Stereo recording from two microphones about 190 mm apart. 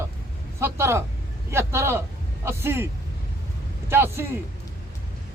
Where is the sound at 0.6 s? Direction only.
15° right (ahead or behind).